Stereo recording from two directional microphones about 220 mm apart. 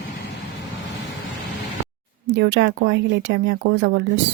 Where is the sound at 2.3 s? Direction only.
55° right (ahead or behind).